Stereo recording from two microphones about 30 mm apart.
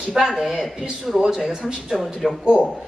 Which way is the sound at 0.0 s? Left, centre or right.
Centre.